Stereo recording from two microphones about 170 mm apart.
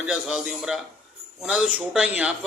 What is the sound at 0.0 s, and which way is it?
A man's voice, 5° right (ahead or behind).